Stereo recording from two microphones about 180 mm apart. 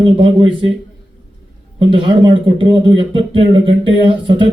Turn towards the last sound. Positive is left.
turn(degrees=-30)  # may be behind; listen again after turning